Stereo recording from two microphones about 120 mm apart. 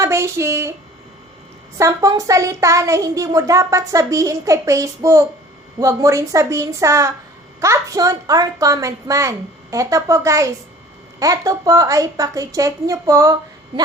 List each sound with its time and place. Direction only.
0.0 s speech: 25° right (ahead or behind)
1.8 s a woman's voice: 30° right (ahead or behind)